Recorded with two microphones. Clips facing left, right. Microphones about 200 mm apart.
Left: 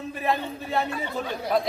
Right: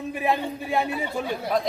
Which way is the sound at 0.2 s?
15° right (ahead or behind).